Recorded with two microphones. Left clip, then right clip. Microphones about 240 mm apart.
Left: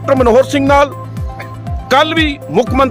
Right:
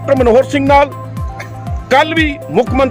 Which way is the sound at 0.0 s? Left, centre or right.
Centre.